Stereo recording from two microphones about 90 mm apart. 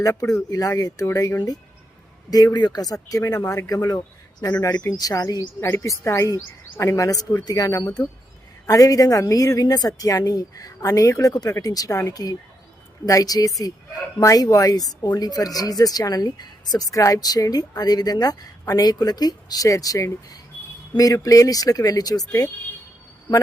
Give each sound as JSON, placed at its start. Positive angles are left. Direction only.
{"t": 0.0, "sound": "a woman's voice", "side_deg": 35}
{"t": 5.7, "sound": "a woman's voice", "side_deg": 35}